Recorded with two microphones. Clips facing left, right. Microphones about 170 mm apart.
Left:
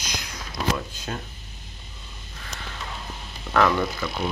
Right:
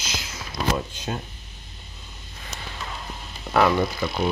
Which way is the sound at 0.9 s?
20° right (ahead or behind).